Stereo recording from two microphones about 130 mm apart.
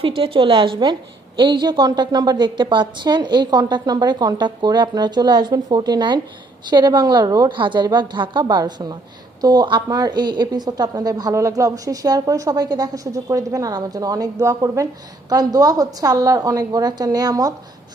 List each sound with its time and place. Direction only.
0.0 s a woman's voice: 45° right (ahead or behind)